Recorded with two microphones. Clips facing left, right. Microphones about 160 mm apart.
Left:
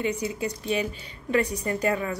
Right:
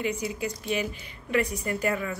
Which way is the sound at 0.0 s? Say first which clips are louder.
Left 2 dB; 30° left (ahead or behind).